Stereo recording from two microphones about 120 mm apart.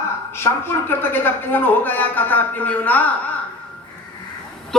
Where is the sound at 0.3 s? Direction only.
20° left (ahead or behind).